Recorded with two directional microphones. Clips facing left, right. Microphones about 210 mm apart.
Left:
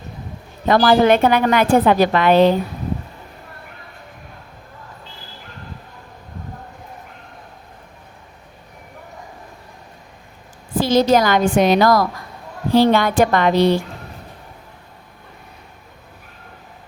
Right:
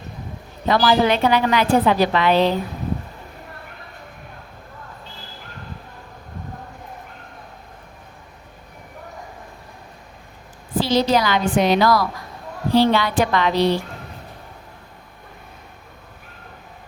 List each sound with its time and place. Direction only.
0.7 s a woman's voice: 50° left (ahead or behind)
10.8 s a woman's voice: 50° left (ahead or behind)